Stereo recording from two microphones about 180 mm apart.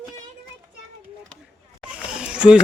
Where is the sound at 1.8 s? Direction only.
5° right (ahead or behind).